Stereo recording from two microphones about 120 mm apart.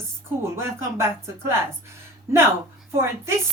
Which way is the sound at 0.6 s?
20° right (ahead or behind).